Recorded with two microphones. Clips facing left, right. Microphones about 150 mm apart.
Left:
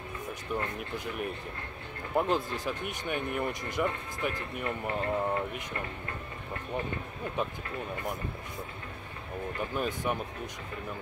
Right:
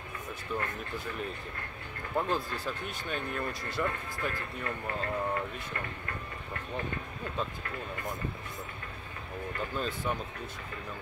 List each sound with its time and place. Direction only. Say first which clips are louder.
0.6 s speech: left 1 dB; 15° left (ahead or behind)
9.6 s speech: left 2 dB; 15° left (ahead or behind)